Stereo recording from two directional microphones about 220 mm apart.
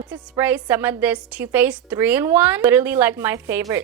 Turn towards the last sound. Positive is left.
turn(degrees=-10)  # may be behind; listen again after turning